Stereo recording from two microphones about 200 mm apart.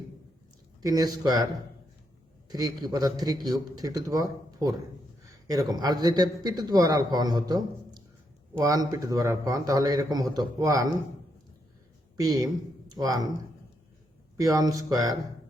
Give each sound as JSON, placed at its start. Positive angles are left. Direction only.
{"t": 0.8, "sound": "a man's voice", "side_deg": -20}
{"t": 2.5, "sound": "a man's voice", "side_deg": -20}
{"t": 5.3, "sound": "a man's voice", "side_deg": -20}
{"t": 12.1, "sound": "speech", "side_deg": -15}
{"t": 14.3, "sound": "a man's voice", "side_deg": -15}